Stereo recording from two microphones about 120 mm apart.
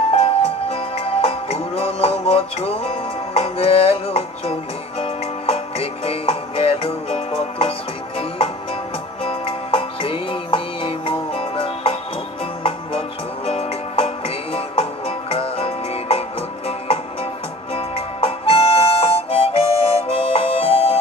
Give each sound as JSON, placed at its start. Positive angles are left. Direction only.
{"t": 0.1, "sound": "music", "side_deg": 55}
{"t": 9.2, "sound": "music", "side_deg": 50}
{"t": 13.5, "sound": "music", "side_deg": 60}
{"t": 17.7, "sound": "harmonica", "side_deg": 55}